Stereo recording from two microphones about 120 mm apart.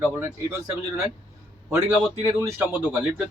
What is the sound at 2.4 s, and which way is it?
Speech, 15° right (ahead or behind).